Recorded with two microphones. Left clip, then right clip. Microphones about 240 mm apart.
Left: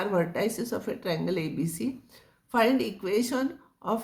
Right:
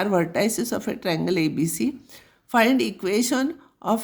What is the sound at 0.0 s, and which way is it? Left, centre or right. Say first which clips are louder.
A woman's voice: right 5 dB; right.